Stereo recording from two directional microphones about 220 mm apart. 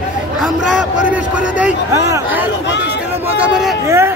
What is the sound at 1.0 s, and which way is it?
A man's voice, 5° right (ahead or behind).